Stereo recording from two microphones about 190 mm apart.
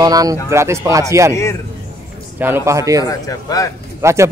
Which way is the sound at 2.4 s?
15° right (ahead or behind).